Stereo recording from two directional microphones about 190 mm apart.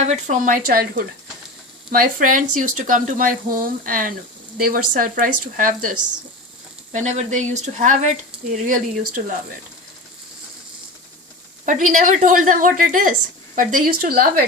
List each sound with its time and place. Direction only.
0.0 s speech: 40° right (ahead or behind)
11.6 s speech: 40° right (ahead or behind)